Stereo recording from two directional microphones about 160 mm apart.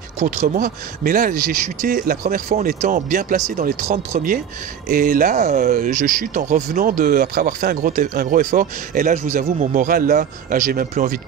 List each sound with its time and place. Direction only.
0.2 s speech: 50° right (ahead or behind)